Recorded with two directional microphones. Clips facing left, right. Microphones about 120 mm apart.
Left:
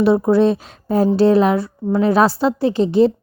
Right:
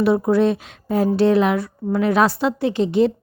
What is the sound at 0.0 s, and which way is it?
A woman's voice, 30° left (ahead or behind).